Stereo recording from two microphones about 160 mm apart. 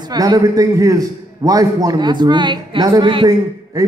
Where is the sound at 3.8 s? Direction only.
20° right (ahead or behind).